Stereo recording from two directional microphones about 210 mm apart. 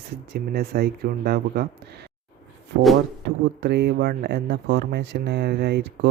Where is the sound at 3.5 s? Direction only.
55° right (ahead or behind).